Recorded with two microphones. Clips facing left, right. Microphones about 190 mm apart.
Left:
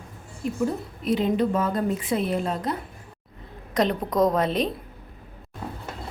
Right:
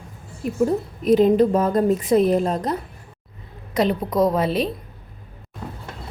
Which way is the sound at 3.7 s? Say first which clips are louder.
Right 3 dB; 5° right (ahead or behind).